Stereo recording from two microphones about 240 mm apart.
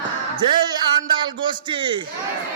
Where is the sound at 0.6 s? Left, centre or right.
Centre.